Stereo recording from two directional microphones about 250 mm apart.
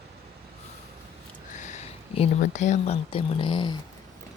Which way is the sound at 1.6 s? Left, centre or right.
Left.